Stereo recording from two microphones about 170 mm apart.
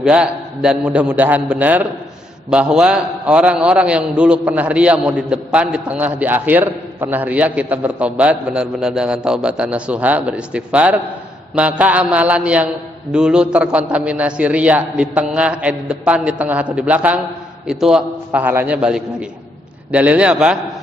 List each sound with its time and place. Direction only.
0.0 s a man's voice: 5° right (ahead or behind)